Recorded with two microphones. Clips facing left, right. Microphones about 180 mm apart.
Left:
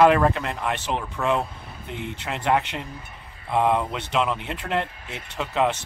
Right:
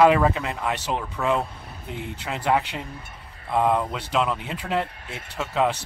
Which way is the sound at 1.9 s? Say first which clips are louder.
Left 1 dB; 60° left (ahead or behind).